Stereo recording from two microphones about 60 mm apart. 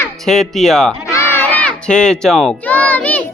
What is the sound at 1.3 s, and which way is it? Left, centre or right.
Crowd, left.